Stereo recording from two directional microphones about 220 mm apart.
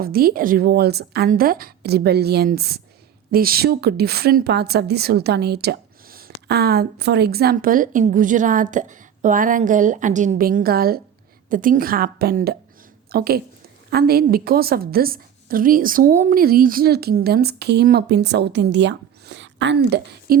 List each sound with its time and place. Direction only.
0.0 s a woman's voice: 40° right (ahead or behind)